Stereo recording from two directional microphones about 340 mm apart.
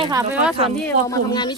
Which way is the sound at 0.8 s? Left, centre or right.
Centre.